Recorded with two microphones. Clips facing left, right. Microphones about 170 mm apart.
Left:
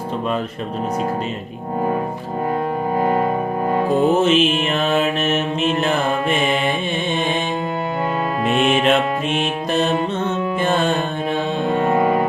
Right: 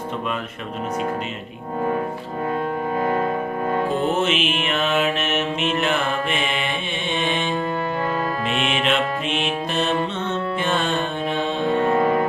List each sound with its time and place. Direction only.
3.0 s music: 30° left (ahead or behind)
4.3 s music: 40° left (ahead or behind)
8.4 s music: 45° left (ahead or behind)
11.9 s music: 10° left (ahead or behind)